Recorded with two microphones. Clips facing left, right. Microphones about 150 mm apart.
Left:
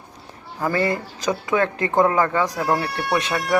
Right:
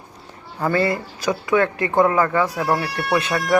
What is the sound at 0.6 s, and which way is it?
Speech, 20° left (ahead or behind).